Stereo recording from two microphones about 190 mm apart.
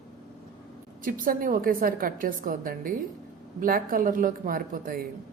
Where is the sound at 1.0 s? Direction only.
45° right (ahead or behind).